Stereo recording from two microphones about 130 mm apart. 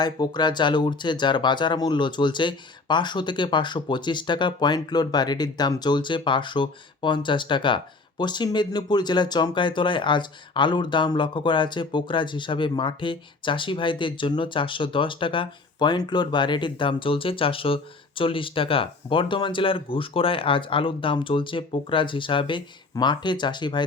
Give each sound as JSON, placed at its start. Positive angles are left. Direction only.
{"t": 0.0, "sound": "speech", "side_deg": 35}